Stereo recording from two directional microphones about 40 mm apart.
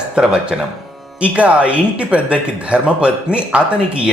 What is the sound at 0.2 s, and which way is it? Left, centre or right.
Speech, right.